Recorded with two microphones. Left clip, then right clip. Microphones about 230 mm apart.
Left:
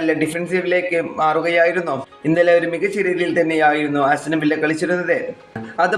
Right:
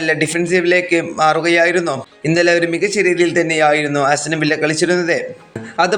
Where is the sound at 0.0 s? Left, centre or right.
Right.